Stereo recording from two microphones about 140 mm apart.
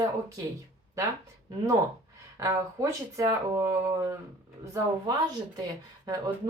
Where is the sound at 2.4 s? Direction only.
20° right (ahead or behind).